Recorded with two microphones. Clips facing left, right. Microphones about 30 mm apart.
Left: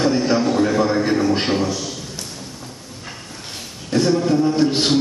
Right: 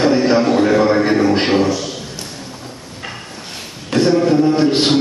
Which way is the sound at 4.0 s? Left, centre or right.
Right.